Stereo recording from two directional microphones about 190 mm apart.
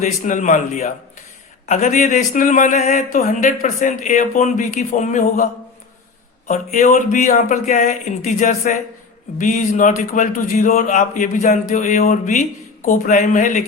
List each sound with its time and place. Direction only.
0.0 s speech: 40° left (ahead or behind)
6.5 s speech: 40° left (ahead or behind)